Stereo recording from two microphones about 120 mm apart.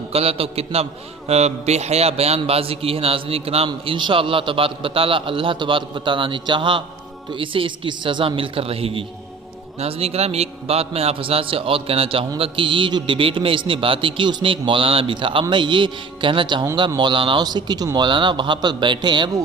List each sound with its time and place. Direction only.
0.1 s a man's voice: 55° right (ahead or behind)
3.7 s a man's voice: 40° right (ahead or behind)